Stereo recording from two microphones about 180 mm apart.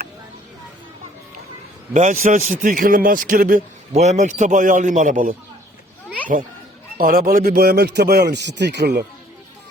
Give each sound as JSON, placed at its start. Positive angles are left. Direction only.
{"t": 1.9, "sound": "a man's voice", "side_deg": -40}
{"t": 3.9, "sound": "a man's voice", "side_deg": -40}
{"t": 6.9, "sound": "a man's voice", "side_deg": -50}